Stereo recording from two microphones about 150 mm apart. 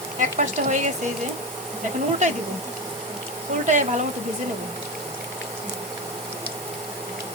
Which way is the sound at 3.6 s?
50° right (ahead or behind).